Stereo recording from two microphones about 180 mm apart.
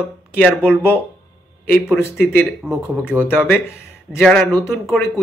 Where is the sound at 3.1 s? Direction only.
5° right (ahead or behind).